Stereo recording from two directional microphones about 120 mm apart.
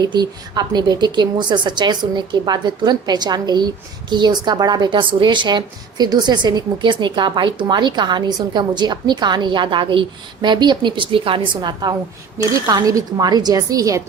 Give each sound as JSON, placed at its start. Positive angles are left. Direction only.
{"t": 0.0, "sound": "a woman's voice", "side_deg": -35}